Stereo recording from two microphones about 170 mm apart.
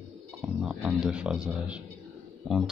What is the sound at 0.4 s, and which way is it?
Speech, centre (ahead or behind).